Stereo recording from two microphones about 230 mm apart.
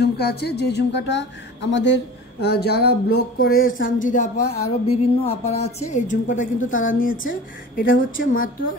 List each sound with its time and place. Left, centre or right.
0.0 s a woman's voice: left